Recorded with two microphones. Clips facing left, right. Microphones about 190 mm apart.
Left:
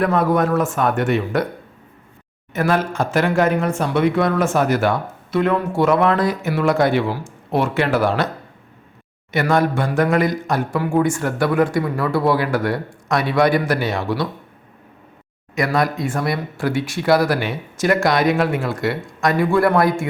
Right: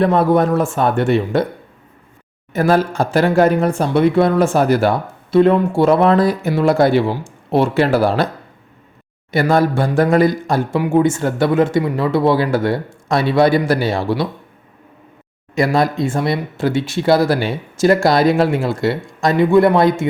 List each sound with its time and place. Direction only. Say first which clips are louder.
0.0 s speech: right 4 dB; 30° right (ahead or behind)
2.5 s speech: right 4 dB; 35° right (ahead or behind)
9.3 s speech: right 3 dB; 35° right (ahead or behind)
15.5 s speech: right 4 dB; 30° right (ahead or behind)